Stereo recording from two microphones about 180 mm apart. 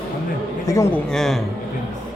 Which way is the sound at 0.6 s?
20° left (ahead or behind).